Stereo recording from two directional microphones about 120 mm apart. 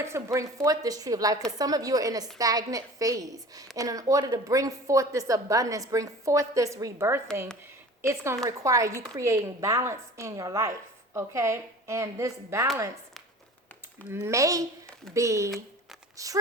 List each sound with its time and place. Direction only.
0.0 s a woman's voice: 25° right (ahead or behind)
14.1 s a woman's voice: 20° right (ahead or behind)